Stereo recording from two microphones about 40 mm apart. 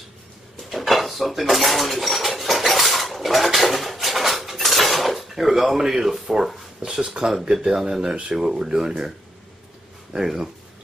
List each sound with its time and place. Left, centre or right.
0.7 s dishes: centre
6.4 s speech: centre
6.8 s speech: centre
10.1 s speech: centre